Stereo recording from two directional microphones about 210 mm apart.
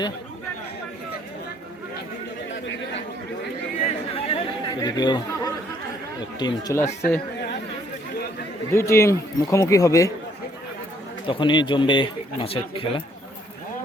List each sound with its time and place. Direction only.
3.8 s chatter: 30° left (ahead or behind)
6.4 s a man's voice: 15° left (ahead or behind)
8.7 s a man's voice: 10° left (ahead or behind)
11.3 s speech: 20° left (ahead or behind)